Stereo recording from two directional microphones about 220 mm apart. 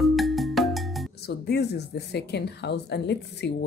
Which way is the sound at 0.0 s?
Centre (ahead or behind).